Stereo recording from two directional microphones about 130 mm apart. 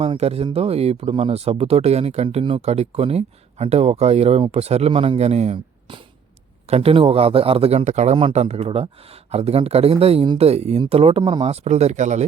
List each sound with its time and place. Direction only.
0.0 s speech: 50° right (ahead or behind)
11.2 s speech: 35° right (ahead or behind)
11.4 s speech: 55° right (ahead or behind)